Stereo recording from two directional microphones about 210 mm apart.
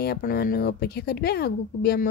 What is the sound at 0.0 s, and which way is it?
A woman's voice, 45° left (ahead or behind).